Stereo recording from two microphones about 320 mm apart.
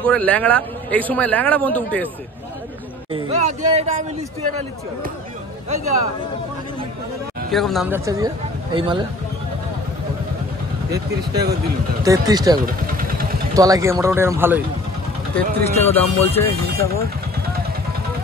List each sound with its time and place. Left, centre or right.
0.0 s a man's voice: centre
3.1 s speech: centre
7.5 s a man's voice: centre
10.9 s speech: right
12.0 s speech: centre
12.5 s vehicle: right
13.6 s speech: centre
15.3 s speech: centre